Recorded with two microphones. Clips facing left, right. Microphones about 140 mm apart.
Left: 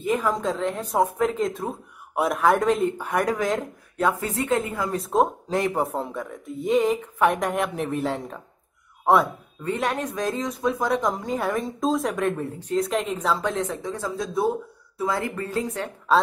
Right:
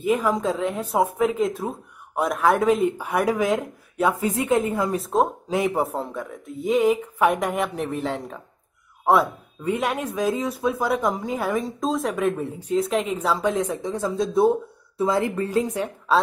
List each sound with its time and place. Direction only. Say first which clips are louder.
0.0 s a woman's voice: right 2 dB; 10° right (ahead or behind)
4.9 s a woman's voice: even; centre (ahead or behind)